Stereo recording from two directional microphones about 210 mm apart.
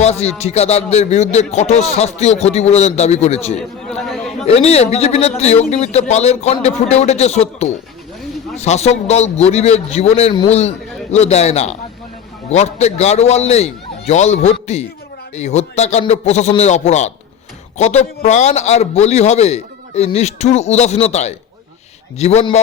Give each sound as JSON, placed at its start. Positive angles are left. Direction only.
{"t": 0.0, "sound": "a man's voice", "side_deg": 30}
{"t": 3.8, "sound": "chatter", "side_deg": 0}
{"t": 4.4, "sound": "a man's voice", "side_deg": 30}